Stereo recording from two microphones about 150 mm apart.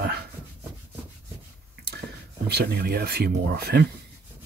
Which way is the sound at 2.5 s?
90° right.